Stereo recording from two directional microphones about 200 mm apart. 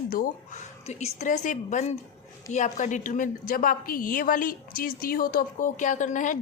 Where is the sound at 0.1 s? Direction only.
45° left (ahead or behind).